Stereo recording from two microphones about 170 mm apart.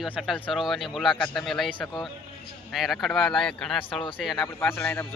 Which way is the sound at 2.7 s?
Centre (ahead or behind).